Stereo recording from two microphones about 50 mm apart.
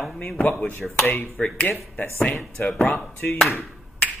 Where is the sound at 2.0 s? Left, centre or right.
Left.